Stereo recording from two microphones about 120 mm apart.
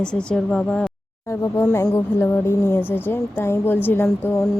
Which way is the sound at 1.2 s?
25° left (ahead or behind).